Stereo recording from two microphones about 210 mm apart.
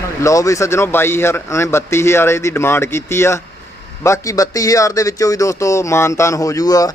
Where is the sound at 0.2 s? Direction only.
15° left (ahead or behind).